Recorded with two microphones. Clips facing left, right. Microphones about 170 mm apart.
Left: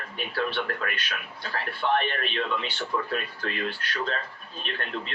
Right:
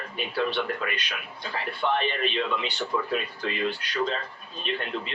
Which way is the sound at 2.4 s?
10° right (ahead or behind).